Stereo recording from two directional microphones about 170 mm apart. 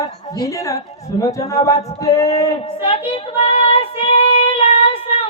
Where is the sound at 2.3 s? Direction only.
20° left (ahead or behind).